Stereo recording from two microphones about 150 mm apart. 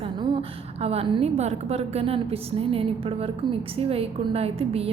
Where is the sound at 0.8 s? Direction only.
40° right (ahead or behind).